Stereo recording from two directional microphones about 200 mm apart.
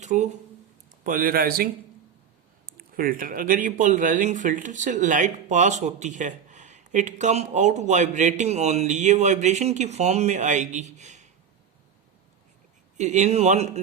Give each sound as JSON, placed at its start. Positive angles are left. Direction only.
{"t": 0.0, "sound": "a man's voice", "side_deg": -35}
{"t": 13.0, "sound": "a man's voice", "side_deg": -35}